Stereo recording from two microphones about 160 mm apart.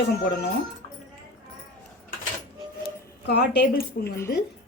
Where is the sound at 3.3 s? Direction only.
90° left.